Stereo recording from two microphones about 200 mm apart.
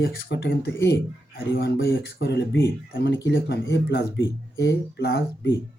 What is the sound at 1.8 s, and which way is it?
Speech, 55° left (ahead or behind).